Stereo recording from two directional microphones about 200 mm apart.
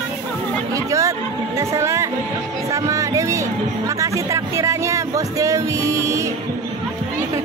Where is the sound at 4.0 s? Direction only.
15° right (ahead or behind).